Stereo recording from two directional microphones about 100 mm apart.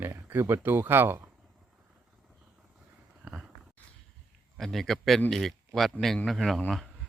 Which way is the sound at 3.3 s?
10° right (ahead or behind).